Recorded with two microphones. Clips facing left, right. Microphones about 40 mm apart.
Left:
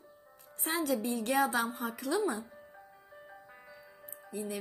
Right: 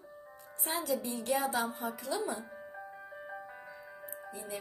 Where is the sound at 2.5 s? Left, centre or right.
Centre.